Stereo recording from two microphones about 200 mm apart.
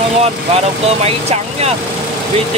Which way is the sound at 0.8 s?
30° right (ahead or behind).